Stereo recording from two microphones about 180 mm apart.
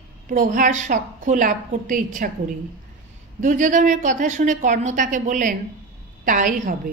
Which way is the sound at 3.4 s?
45° right (ahead or behind).